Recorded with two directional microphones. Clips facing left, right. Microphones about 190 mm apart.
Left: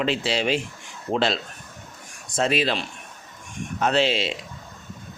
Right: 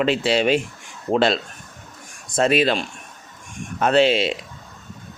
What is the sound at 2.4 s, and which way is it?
A man's voice, 55° right (ahead or behind).